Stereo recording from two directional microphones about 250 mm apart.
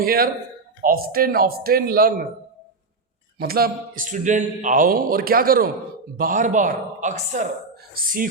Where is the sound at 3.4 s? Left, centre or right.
Right.